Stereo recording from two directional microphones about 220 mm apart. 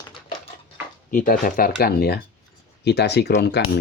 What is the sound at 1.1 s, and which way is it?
Speech, 40° left (ahead or behind).